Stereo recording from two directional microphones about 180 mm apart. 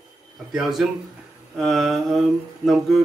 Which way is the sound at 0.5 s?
Centre (ahead or behind).